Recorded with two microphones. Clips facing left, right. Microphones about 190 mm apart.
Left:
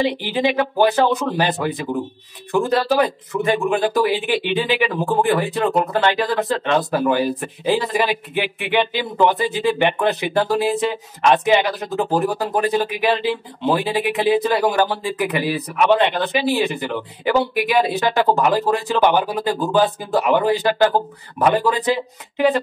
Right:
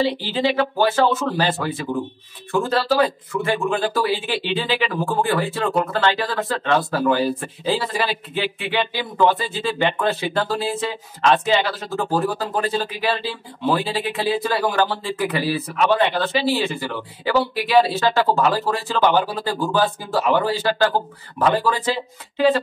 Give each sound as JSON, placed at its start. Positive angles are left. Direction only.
{"t": 0.0, "sound": "speech", "side_deg": 15}